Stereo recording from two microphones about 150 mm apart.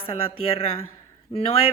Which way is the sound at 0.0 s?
40° left (ahead or behind).